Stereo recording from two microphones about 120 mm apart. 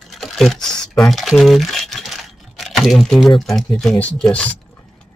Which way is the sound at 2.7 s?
Centre (ahead or behind).